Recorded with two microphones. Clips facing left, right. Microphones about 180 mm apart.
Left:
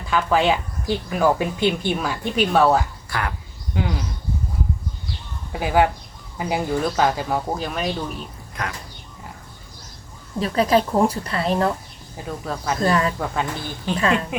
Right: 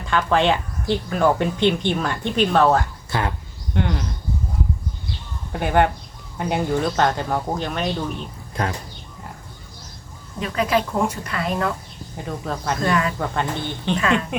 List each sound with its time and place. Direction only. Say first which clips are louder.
0.0 s speech: even; 5° left (ahead or behind)
3.1 s speech: right 4 dB; 25° right (ahead or behind)
3.8 s speech: right 2 dB; 5° left (ahead or behind)
5.5 s speech: even; 5° left (ahead or behind)
8.6 s speech: right 5 dB; 30° right (ahead or behind)
10.4 s a woman's voice: left 3 dB; 35° left (ahead or behind)
12.1 s speech: right 1 dB; centre (ahead or behind)
12.8 s a woman's voice: left 2 dB; 35° left (ahead or behind)
13.1 s speech: right 1 dB; 5° left (ahead or behind)
13.9 s a woman's voice: even; 35° left (ahead or behind)